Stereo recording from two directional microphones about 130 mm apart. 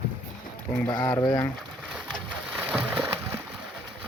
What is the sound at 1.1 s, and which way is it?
Speech, 15° left (ahead or behind).